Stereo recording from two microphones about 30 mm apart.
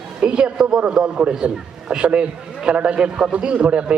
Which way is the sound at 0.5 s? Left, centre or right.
Right.